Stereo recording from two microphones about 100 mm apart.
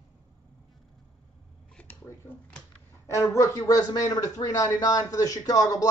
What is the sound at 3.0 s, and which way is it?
Speech, 30° left (ahead or behind).